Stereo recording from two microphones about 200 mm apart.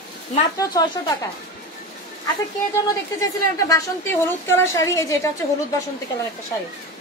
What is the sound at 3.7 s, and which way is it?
A woman's voice, 15° left (ahead or behind).